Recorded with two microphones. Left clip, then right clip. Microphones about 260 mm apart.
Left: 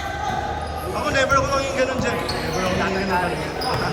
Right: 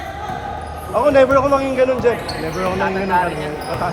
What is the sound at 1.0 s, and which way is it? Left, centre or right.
Speech, centre.